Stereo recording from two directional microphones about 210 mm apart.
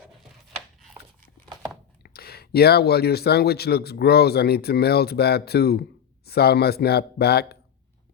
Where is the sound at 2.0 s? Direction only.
45° left (ahead or behind).